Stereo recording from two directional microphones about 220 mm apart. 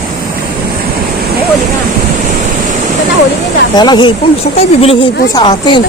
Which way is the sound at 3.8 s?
20° left (ahead or behind).